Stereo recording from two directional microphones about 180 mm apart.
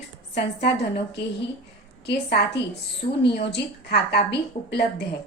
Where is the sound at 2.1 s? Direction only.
65° left (ahead or behind).